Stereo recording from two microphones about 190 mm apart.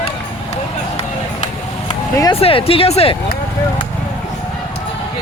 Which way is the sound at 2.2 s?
25° left (ahead or behind).